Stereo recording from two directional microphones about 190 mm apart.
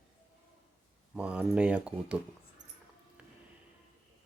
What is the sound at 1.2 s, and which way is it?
Speech, 5° right (ahead or behind).